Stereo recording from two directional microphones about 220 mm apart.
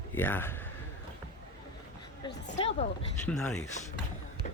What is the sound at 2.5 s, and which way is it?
Speech, 30° left (ahead or behind).